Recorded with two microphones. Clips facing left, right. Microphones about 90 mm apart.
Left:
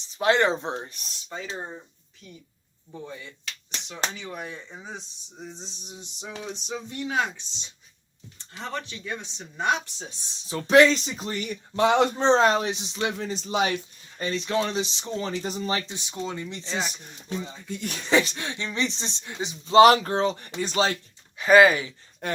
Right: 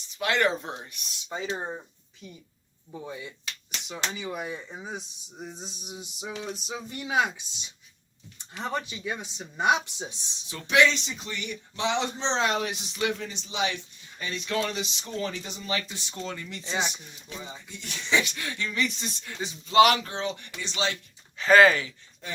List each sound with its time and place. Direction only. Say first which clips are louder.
0.1 s speech: left 4 dB; 35° left (ahead or behind)
0.8 s speech: left 5 dB; 35° left (ahead or behind)
1.3 s speech: right 3 dB; 15° right (ahead or behind)
2.9 s speech: right 1 dB; 10° right (ahead or behind)
6.5 s music: left 1 dB; 5° right (ahead or behind)
8.4 s speech: right 2 dB; 15° right (ahead or behind)
10.5 s speech: left 5 dB; 40° left (ahead or behind)
12.6 s speech: left 1 dB; 25° left (ahead or behind)
15.9 s speech: left 3 dB; 15° left (ahead or behind)
17.3 s music: left 7 dB; 5° right (ahead or behind)
17.7 s speech: left 4 dB; 50° left (ahead or behind); by 19.7 s 20° left (ahead or behind)
19.7 s speech: left 5 dB; 35° left (ahead or behind)
21.3 s speech: left 2 dB; 15° left (ahead or behind)
22.2 s speech: left 8 dB; 60° left (ahead or behind)